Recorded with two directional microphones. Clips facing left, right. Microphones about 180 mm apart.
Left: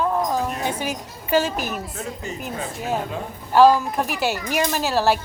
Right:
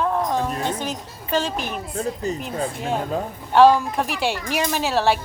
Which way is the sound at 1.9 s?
35° right (ahead or behind).